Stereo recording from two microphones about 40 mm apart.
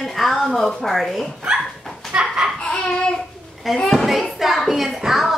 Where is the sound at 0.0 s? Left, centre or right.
Centre.